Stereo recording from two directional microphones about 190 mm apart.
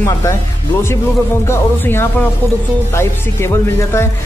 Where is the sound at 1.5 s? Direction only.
10° left (ahead or behind).